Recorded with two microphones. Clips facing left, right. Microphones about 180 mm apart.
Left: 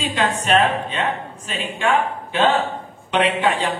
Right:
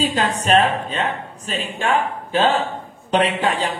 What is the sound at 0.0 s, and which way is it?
A man's voice, 40° right (ahead or behind).